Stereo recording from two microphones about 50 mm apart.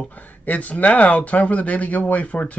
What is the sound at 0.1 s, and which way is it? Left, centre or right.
Speech, left.